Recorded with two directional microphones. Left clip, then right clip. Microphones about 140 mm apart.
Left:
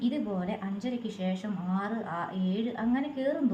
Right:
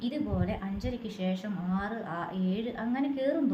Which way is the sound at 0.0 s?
25° right (ahead or behind).